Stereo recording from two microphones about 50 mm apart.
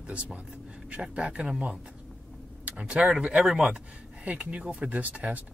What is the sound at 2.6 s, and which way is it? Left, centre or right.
Speech, right.